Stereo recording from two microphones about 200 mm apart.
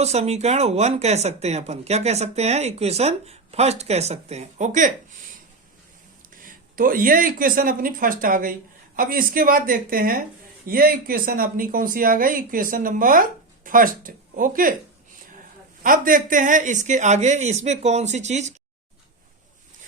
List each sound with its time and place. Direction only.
0.0 s speech: 30° right (ahead or behind)
6.4 s speech: 45° right (ahead or behind)
15.8 s speech: 45° right (ahead or behind)